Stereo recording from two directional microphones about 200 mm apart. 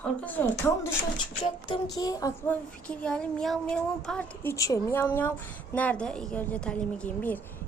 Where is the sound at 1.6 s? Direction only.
20° left (ahead or behind).